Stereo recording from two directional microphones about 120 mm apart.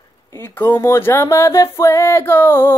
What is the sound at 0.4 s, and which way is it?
Speech, 20° left (ahead or behind).